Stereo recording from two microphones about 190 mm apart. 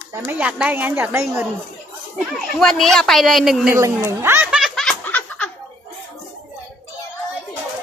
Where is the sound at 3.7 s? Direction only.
15° right (ahead or behind); by 5.5 s 10° left (ahead or behind).